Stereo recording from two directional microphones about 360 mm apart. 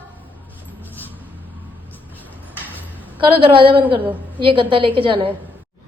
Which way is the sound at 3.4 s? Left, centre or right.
Centre.